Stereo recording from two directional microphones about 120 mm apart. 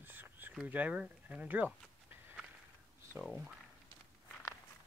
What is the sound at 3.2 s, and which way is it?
Speech, 5° right (ahead or behind).